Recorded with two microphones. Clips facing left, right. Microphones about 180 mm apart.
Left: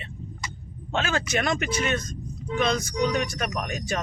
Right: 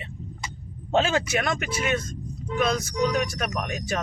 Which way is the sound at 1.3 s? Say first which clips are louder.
Left 1 dB; centre (ahead or behind).